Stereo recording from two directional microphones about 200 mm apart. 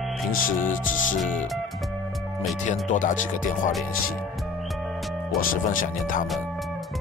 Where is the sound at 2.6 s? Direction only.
40° left (ahead or behind).